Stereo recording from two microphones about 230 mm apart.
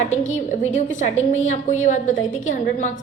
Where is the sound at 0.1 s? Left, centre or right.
Left.